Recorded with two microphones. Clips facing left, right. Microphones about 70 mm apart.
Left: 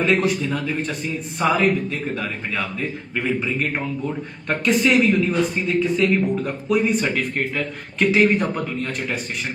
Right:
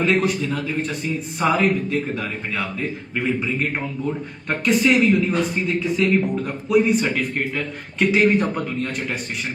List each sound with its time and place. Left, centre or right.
0.0 s a man's voice: centre